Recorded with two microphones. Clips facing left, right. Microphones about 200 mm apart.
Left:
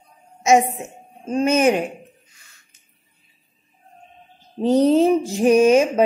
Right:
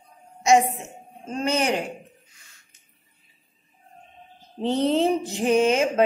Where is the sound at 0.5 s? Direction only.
15° left (ahead or behind).